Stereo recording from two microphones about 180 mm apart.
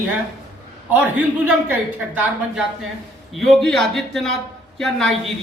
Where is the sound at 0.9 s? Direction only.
10° right (ahead or behind).